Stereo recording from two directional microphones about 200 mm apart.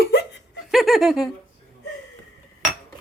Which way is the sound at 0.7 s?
Centre (ahead or behind).